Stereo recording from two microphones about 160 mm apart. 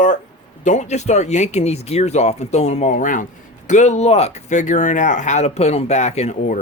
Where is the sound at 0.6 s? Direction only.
45° left (ahead or behind).